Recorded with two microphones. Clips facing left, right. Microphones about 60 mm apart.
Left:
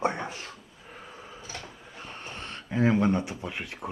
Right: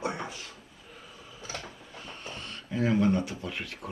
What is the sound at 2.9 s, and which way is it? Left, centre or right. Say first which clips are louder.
Speech: left 1 dB; left.